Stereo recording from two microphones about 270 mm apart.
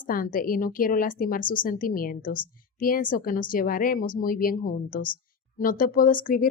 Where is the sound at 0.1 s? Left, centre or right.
Left.